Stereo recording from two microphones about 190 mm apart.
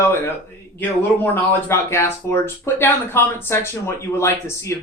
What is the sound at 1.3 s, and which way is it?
Speech, 10° left (ahead or behind).